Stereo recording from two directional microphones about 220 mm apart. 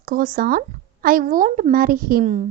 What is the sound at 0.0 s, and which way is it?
A woman's voice, 40° right (ahead or behind).